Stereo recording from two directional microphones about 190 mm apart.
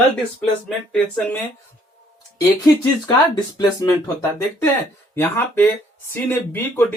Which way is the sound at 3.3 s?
20° left (ahead or behind).